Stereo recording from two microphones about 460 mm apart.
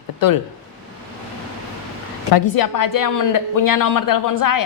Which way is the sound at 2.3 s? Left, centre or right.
Left.